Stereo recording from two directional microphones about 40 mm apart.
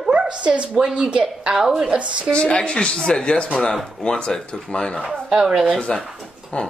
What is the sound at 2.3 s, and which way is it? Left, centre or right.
Speech, left.